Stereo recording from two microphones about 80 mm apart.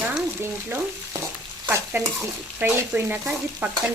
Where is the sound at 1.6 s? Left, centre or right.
Right.